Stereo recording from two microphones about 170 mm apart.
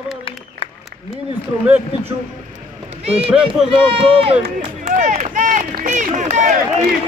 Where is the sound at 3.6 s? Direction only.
35° right (ahead or behind).